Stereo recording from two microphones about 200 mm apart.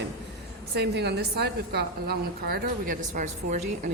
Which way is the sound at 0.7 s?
55° right (ahead or behind).